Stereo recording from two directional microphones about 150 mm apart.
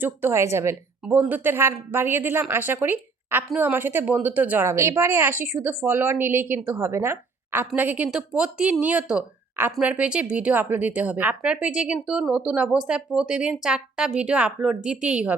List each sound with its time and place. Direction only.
0.0 s speech: 15° right (ahead or behind)